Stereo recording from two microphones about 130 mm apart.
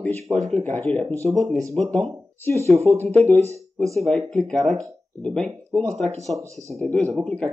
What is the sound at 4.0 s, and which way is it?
Speech, centre (ahead or behind).